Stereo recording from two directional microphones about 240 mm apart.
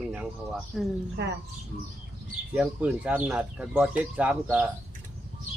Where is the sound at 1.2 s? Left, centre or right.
Right.